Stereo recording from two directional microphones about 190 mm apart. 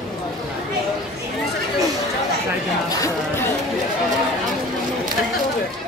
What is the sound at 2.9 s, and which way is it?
Chatter, 15° left (ahead or behind).